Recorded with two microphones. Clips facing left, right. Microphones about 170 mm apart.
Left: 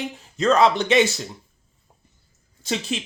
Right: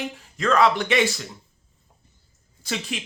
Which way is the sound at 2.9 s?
30° left (ahead or behind).